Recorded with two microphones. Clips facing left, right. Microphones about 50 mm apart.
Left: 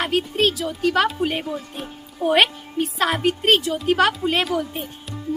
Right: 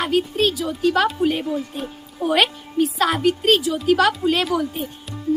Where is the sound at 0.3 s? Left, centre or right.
Left.